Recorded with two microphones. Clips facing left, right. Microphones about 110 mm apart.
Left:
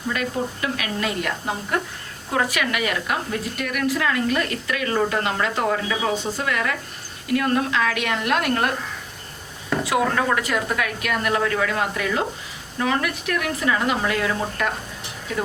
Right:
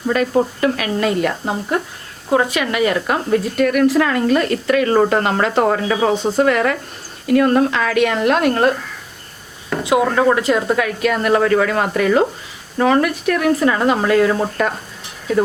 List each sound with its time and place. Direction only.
0.1 s speech: 40° right (ahead or behind)
2.3 s speech: 25° right (ahead or behind)
3.6 s speech: 45° right (ahead or behind); by 8.7 s 30° right (ahead or behind)
9.8 s speech: 20° right (ahead or behind)
11.3 s speech: 50° right (ahead or behind)